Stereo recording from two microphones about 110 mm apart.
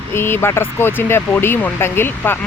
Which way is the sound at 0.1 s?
20° left (ahead or behind).